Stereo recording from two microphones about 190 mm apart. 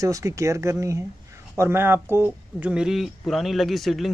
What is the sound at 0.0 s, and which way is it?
Speech, 15° right (ahead or behind).